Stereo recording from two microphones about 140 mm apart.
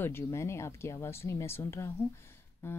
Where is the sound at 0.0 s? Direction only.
20° left (ahead or behind).